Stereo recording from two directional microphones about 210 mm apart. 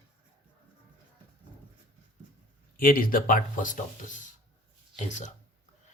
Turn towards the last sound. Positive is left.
turn(degrees=35)  # may be behind; listen again after turning